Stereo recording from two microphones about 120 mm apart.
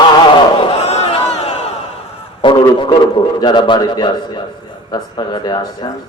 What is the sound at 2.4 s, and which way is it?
A man's voice, 40° left (ahead or behind).